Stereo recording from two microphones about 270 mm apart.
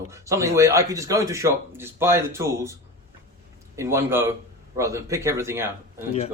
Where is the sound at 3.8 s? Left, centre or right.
Centre.